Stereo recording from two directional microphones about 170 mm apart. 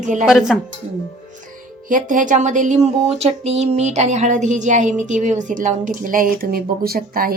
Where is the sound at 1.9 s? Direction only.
50° right (ahead or behind).